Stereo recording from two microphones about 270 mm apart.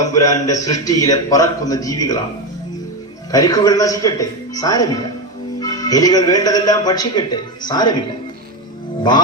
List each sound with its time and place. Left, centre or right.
0.0 s a man's voice: centre
3.3 s a man's voice: centre